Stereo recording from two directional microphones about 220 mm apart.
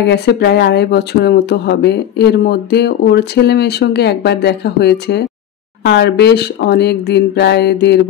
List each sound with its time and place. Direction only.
0.0 s speech: 50° left (ahead or behind)